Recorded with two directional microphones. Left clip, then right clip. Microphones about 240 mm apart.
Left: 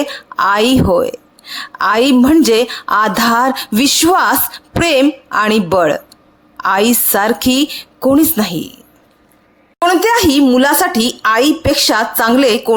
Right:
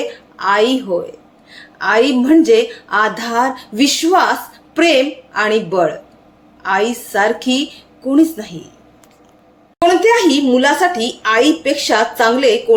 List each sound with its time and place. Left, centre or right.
0.3 s a woman's voice: left
9.8 s a woman's voice: left